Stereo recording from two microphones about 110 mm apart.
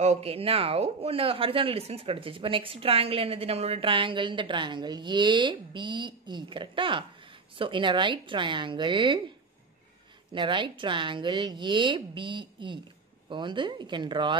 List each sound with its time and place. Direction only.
0.0 s speech: 75° right (ahead or behind); by 9.2 s 45° right (ahead or behind)
10.3 s speech: 45° right (ahead or behind)